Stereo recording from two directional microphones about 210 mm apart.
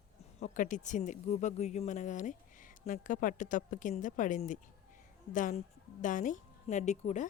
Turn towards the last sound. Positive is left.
turn(degrees=35)  # may be behind; listen again after turning